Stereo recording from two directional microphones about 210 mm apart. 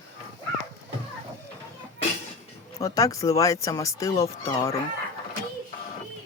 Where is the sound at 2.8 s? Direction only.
15° left (ahead or behind).